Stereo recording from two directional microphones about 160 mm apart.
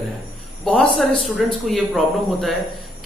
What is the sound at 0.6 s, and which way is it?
Speech, 5° left (ahead or behind).